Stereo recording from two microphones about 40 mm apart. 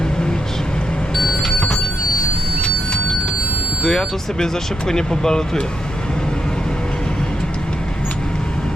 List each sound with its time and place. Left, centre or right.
1.1 s vehicle: centre
2.6 s vehicle: left
3.8 s speech: centre